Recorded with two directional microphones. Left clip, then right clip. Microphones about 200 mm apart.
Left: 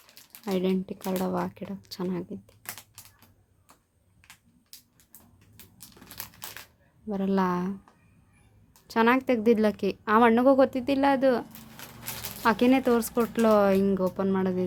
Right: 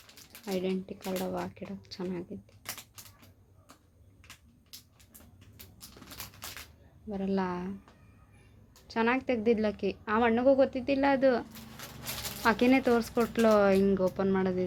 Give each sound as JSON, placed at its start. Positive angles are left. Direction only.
{"t": 0.4, "sound": "a woman's voice", "side_deg": 25}
{"t": 7.1, "sound": "a woman's voice", "side_deg": 25}
{"t": 8.9, "sound": "a woman's voice", "side_deg": 25}